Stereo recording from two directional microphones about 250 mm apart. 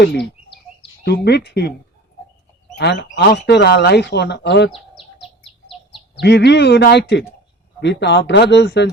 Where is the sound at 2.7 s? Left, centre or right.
Left.